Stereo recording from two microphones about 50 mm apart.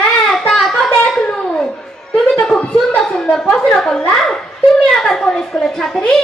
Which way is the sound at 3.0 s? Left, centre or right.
Centre.